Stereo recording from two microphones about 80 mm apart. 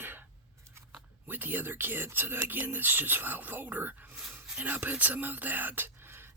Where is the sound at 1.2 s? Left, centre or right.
Right.